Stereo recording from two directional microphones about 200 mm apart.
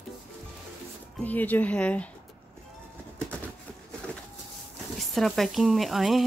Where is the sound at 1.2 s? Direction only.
10° left (ahead or behind).